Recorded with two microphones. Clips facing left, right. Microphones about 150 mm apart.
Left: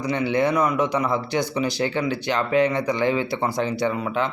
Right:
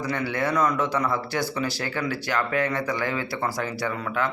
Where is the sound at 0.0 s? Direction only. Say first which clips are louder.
Left 5 dB; 20° left (ahead or behind).